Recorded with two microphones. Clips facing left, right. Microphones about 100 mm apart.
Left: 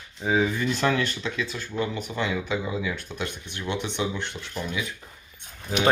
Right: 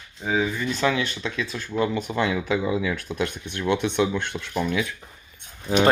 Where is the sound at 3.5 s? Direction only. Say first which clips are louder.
Right 8 dB; 55° right (ahead or behind).